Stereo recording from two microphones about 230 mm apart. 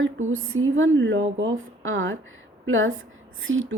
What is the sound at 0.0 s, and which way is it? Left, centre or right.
A woman's voice, right.